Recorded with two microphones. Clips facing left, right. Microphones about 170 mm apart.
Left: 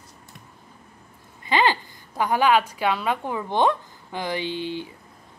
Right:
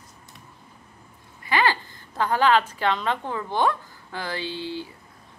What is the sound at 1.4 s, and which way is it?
A woman's voice, 20° left (ahead or behind).